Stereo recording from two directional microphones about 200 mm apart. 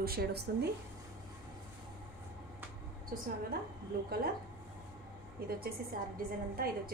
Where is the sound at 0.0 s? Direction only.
50° right (ahead or behind).